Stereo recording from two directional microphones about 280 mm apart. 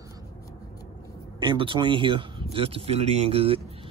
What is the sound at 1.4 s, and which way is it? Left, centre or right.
Speech, centre.